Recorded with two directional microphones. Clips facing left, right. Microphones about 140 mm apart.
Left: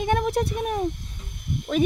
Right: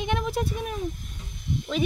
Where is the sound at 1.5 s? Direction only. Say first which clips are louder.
Left 4 dB; 50° left (ahead or behind).